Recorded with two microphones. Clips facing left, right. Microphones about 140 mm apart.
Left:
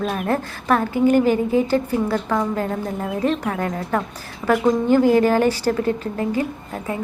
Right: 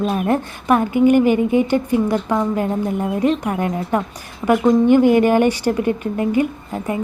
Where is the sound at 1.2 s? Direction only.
35° left (ahead or behind).